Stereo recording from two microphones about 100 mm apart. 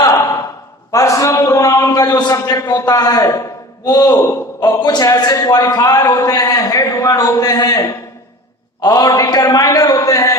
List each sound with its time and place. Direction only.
0.9 s a sound: 35° left (ahead or behind)
2.4 s a man's voice: 35° left (ahead or behind)
4.8 s a man's voice: 40° left (ahead or behind)